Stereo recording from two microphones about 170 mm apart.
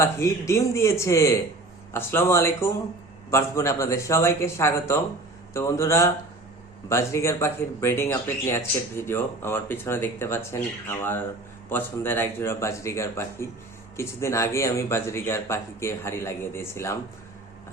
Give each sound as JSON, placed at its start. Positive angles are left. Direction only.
{"t": 0.0, "sound": "speech", "side_deg": 15}